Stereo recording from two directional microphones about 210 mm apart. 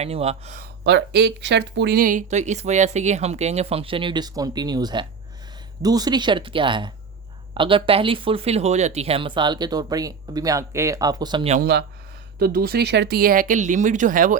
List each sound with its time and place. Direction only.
0.0 s speech: 30° right (ahead or behind)
0.9 s speech: 55° right (ahead or behind); by 11.5 s 20° right (ahead or behind)
11.6 s speech: 50° right (ahead or behind)